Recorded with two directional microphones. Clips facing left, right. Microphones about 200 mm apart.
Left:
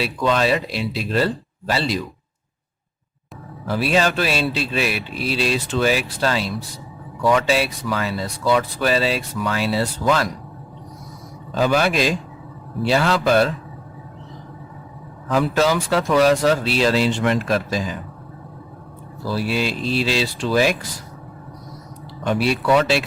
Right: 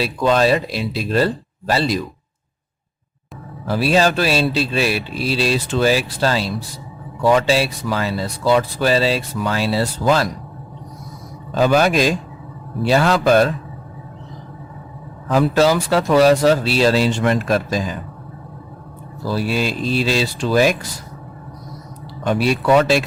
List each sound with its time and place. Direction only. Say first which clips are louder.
0.0 s speech: right 3 dB; 40° right (ahead or behind)
3.7 s speech: right 3 dB; 35° right (ahead or behind)
11.5 s speech: right 3 dB; 45° right (ahead or behind)
15.3 s speech: right 3 dB; 35° right (ahead or behind)
19.3 s speech: right 2 dB; 40° right (ahead or behind)
22.2 s speech: right 2 dB; 40° right (ahead or behind)